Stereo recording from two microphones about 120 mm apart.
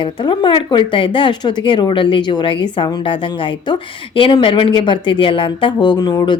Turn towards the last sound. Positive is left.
turn(degrees=35)  # may be behind; listen again after turning